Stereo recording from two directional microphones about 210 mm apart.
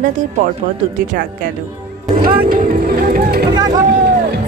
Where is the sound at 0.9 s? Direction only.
40° right (ahead or behind).